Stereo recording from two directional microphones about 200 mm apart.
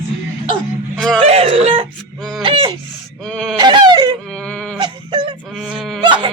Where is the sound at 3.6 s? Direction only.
20° right (ahead or behind).